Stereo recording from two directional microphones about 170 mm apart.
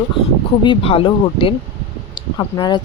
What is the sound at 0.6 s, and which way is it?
Speech, 30° left (ahead or behind).